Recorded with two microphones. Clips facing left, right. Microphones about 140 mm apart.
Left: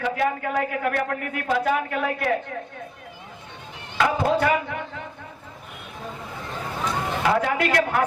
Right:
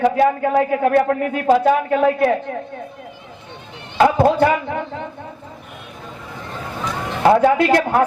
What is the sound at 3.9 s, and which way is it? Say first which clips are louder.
Speech: right 7 dB; 35° right (ahead or behind).